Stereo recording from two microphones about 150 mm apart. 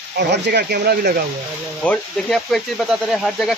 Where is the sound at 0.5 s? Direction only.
90° right.